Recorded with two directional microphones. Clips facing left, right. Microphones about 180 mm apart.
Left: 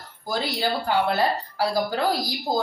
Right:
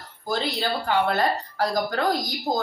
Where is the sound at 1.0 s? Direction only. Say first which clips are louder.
Even; 5° left (ahead or behind).